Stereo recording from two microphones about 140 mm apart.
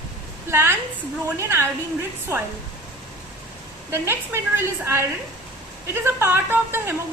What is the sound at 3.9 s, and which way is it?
A woman's voice, 15° right (ahead or behind).